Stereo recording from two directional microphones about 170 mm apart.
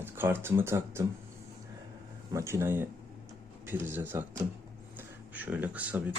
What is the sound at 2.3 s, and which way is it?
Speech, 15° right (ahead or behind).